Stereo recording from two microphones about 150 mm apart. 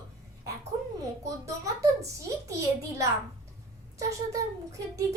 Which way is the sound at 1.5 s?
20° right (ahead or behind).